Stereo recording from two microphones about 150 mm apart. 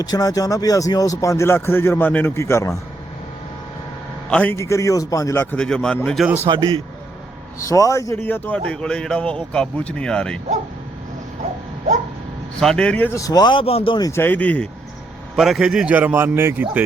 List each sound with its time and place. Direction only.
0.1 s speech: 25° left (ahead or behind)
4.3 s a man's voice: 10° left (ahead or behind)
4.5 s speech: 20° left (ahead or behind); by 6.0 s 5° left (ahead or behind)
6.1 s a man's voice: 10° right (ahead or behind)
6.5 s a man's voice: 35° right (ahead or behind)
7.6 s a man's voice: 20° left (ahead or behind); by 10.4 s 5° left (ahead or behind)
12.5 s a man's voice: 5° left (ahead or behind)
13.1 s speech: 25° left (ahead or behind)
14.0 s a man's voice: 15° left (ahead or behind)
15.4 s a man's voice: centre (ahead or behind)